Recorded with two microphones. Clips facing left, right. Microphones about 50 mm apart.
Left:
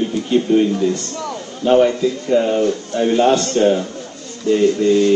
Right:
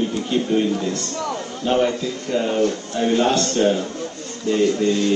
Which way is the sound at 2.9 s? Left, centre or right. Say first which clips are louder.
Left 4 dB; centre.